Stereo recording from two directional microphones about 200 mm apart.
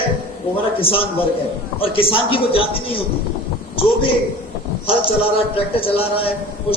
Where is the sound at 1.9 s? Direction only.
25° left (ahead or behind).